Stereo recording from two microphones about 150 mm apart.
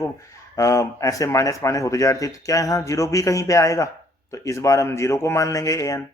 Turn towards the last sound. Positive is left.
turn(degrees=20)  # may be behind; listen again after turning